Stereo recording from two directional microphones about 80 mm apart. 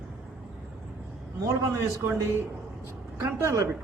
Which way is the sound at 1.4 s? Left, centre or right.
Right.